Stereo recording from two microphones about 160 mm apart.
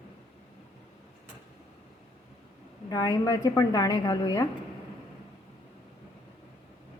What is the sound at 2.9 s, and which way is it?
A woman's voice, 25° left (ahead or behind).